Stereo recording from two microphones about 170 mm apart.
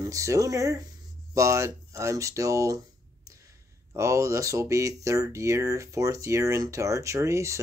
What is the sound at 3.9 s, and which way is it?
Speech, 15° right (ahead or behind).